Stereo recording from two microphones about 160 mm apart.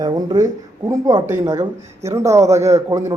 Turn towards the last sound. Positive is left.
turn(degrees=-20)  # may be behind; listen again after turning